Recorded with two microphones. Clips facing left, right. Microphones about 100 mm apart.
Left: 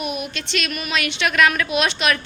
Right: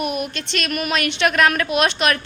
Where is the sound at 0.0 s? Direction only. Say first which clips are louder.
Right 3 dB; 50° right (ahead or behind).